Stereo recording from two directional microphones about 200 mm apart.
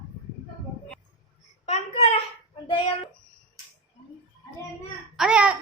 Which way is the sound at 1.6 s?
30° left (ahead or behind).